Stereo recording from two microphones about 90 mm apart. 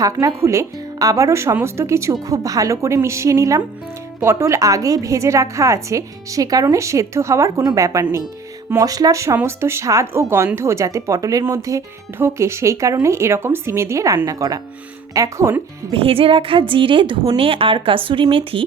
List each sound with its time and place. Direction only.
0.0 s a woman's voice: 35° right (ahead or behind)
15.9 s a woman's voice: 90° right